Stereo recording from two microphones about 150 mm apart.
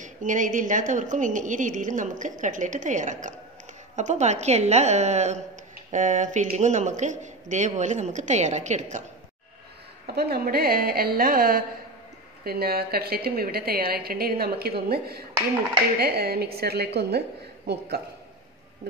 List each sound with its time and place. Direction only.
0.0 s a woman's voice: 60° right (ahead or behind)
10.0 s a woman's voice: 90° right; by 11.6 s 75° right (ahead or behind)
12.4 s a woman's voice: 90° right